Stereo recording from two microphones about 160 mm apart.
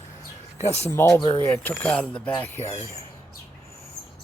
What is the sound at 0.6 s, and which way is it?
Speech, 40° left (ahead or behind).